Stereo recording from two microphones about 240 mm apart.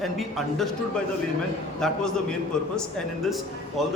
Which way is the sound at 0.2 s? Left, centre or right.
Centre.